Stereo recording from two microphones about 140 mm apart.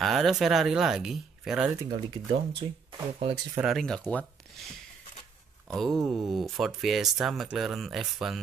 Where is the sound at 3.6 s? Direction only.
Centre (ahead or behind).